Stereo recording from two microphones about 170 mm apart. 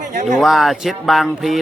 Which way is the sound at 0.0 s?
45° right (ahead or behind).